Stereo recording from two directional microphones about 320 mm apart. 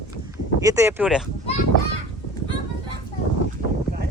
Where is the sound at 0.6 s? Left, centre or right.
Centre.